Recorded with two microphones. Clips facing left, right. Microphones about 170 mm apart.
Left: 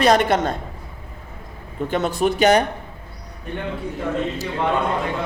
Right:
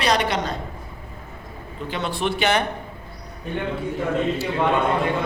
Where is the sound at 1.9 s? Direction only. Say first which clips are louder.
Left 5 dB; 45° left (ahead or behind).